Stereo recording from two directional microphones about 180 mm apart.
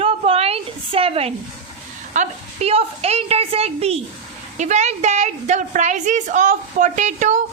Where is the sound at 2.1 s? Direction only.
40° right (ahead or behind).